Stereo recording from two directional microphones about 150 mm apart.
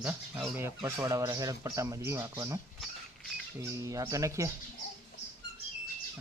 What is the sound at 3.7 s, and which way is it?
Speech, 20° right (ahead or behind).